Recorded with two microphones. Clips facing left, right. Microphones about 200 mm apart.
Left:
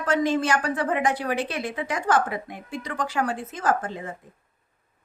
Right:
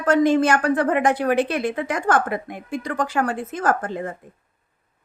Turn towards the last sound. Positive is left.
turn(degrees=-55)  # may be behind; listen again after turning